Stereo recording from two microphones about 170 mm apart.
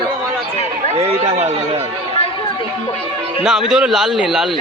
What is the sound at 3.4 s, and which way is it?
A man's voice, 5° right (ahead or behind).